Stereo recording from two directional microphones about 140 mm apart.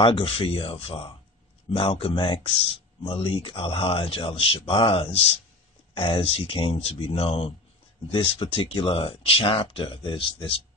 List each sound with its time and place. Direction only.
0.0 s speech: 40° left (ahead or behind)